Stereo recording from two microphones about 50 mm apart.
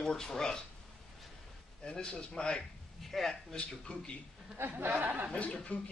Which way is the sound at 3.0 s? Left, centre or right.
Centre.